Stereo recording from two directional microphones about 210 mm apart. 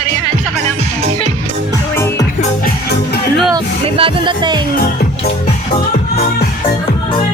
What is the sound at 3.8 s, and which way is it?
Speech, 25° right (ahead or behind).